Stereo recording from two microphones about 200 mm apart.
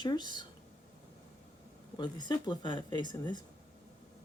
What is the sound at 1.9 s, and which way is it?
Speech, 20° left (ahead or behind).